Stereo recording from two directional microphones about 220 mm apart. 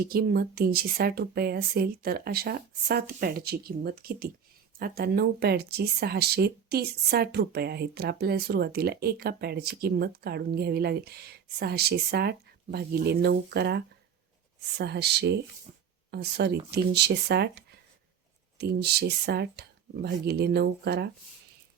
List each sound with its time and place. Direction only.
0.0 s speech: 45° right (ahead or behind)
15.7 s a sound: 30° right (ahead or behind)
16.1 s speech: 50° right (ahead or behind)